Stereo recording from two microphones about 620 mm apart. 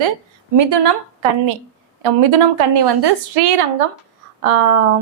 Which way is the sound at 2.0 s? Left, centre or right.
Right.